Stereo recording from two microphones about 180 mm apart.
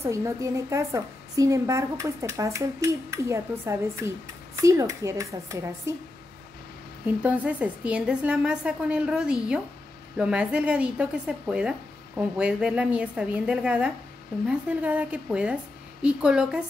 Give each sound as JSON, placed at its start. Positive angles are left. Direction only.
{"t": 0.0, "sound": "a woman's voice", "side_deg": -15}
{"t": 7.2, "sound": "a woman's voice", "side_deg": -10}